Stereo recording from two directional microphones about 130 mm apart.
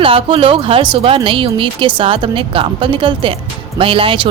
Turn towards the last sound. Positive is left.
turn(degrees=-40)  # may be behind; listen again after turning